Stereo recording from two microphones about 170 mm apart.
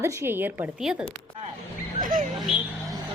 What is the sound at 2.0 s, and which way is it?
Speech, 50° right (ahead or behind).